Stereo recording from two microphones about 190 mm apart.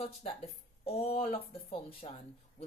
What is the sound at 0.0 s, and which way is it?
A woman's voice, 30° left (ahead or behind).